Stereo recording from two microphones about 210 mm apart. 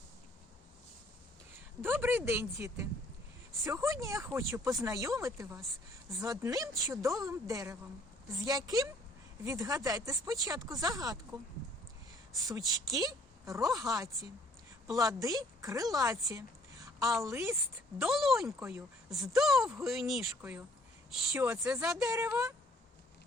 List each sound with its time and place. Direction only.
1.8 s speech: 10° right (ahead or behind)
12.5 s speech: 15° right (ahead or behind)
17.9 s a woman's voice: centre (ahead or behind)